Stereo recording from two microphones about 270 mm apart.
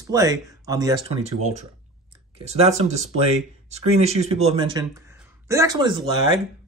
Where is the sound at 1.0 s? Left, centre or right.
Right.